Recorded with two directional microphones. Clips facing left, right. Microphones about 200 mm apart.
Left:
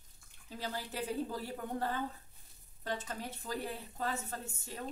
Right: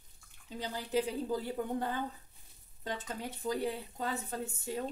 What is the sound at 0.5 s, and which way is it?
A woman's voice, 20° right (ahead or behind).